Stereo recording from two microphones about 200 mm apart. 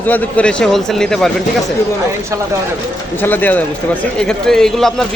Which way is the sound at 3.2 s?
10° left (ahead or behind).